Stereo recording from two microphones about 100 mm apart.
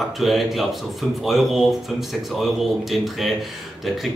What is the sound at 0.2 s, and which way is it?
Speech, centre (ahead or behind).